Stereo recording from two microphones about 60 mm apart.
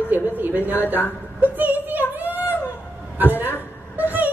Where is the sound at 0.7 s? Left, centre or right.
Left.